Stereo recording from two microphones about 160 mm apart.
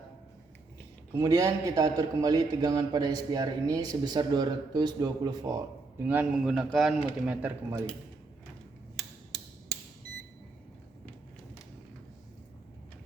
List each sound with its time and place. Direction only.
1.1 s a man's voice: 20° right (ahead or behind)
6.1 s speech: 10° right (ahead or behind)
9.0 s a sound: centre (ahead or behind)